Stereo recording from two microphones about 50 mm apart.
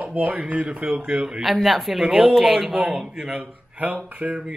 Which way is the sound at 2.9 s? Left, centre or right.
Centre.